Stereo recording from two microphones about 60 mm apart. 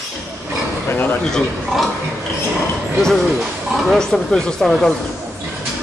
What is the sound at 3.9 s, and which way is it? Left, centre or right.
Speech, centre.